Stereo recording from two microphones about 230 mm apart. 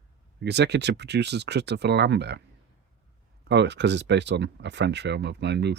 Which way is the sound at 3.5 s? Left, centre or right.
Right.